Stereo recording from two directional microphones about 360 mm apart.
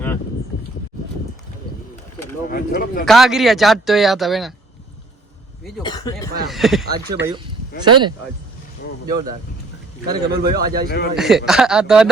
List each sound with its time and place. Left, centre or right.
0.5 s a sound: left
2.5 s speech: left
3.1 s a man's voice: centre
5.8 s speech: centre
6.9 s speech: centre
8.8 s speech: left
10.2 s speech: right
10.8 s speech: left
11.2 s a man's voice: centre